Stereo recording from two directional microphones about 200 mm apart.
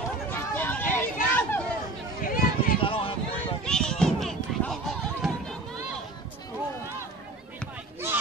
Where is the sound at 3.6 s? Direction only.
5° left (ahead or behind).